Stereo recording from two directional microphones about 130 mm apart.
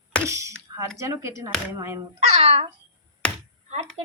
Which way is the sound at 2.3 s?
50° right (ahead or behind).